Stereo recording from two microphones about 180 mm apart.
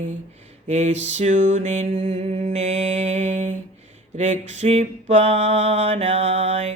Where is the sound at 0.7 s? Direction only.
40° right (ahead or behind).